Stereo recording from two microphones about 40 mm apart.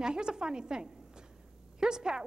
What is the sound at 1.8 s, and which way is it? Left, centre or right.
Speech, centre.